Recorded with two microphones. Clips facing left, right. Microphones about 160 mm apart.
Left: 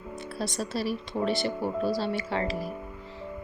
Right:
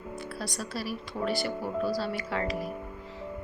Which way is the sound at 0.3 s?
25° left (ahead or behind).